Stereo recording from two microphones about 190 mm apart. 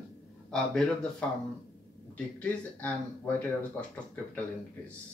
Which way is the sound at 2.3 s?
10° left (ahead or behind).